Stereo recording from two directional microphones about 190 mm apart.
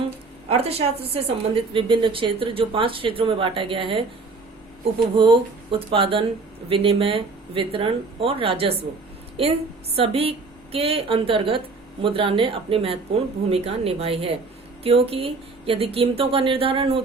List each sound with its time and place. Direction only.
0.4 s speech: 30° right (ahead or behind)
5.1 s speech: 25° right (ahead or behind)